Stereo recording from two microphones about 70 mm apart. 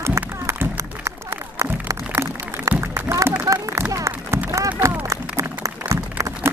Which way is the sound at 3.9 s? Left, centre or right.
Right.